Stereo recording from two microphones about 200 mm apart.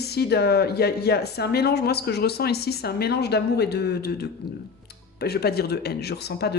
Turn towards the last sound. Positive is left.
turn(degrees=55)  # may be behind; listen again after turning